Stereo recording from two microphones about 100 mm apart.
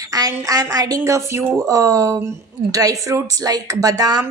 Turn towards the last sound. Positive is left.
turn(degrees=-40)  # may be behind; listen again after turning